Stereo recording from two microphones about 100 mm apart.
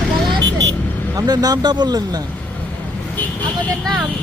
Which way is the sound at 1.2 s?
40° right (ahead or behind).